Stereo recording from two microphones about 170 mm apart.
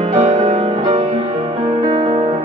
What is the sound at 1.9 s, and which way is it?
Music, 30° right (ahead or behind).